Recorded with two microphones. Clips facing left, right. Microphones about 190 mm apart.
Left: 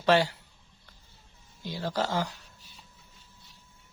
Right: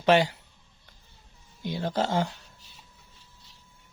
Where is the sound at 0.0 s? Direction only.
20° right (ahead or behind).